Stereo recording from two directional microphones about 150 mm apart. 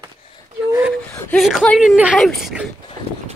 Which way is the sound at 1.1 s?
5° left (ahead or behind).